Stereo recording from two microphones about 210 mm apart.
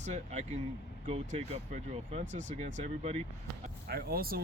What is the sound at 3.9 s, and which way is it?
Speech, 45° right (ahead or behind).